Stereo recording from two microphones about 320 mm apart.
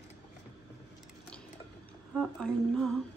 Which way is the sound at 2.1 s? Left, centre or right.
Centre.